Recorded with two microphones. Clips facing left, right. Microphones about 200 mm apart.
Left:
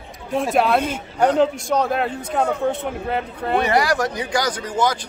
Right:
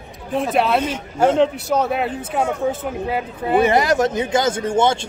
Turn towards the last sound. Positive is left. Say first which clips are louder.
# right 4 dB
turn(degrees=-25)  # may be behind; listen again after turning